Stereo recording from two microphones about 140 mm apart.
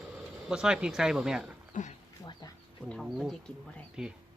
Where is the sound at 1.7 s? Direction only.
65° left (ahead or behind).